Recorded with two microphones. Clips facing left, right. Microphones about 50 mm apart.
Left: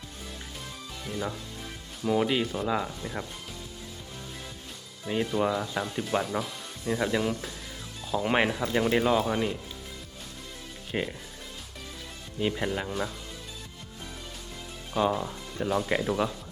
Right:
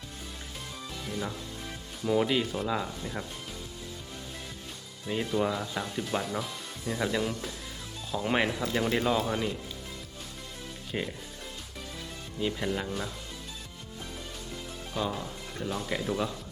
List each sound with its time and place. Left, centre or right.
1.0 s speech: centre
5.0 s speech: centre
10.9 s speech: centre
12.4 s speech: centre
14.9 s speech: left
16.0 s speech: centre